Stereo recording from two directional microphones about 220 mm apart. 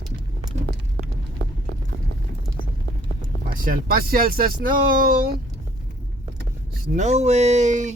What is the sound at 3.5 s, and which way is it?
Speech, 40° right (ahead or behind).